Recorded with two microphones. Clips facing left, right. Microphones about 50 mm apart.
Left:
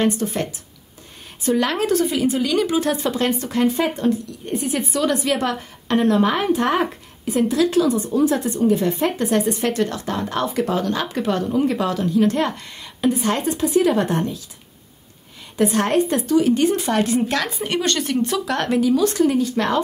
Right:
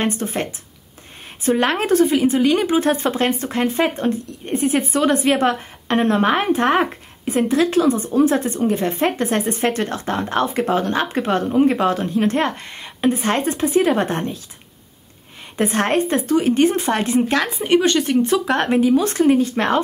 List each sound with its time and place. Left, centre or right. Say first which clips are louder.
0.0 s speech: left 1 dB; right
15.5 s speech: even; right